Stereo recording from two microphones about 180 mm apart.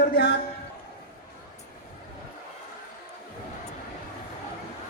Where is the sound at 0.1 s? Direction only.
60° left (ahead or behind).